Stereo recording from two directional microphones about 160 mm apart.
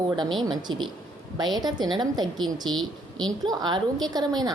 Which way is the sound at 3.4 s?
25° right (ahead or behind).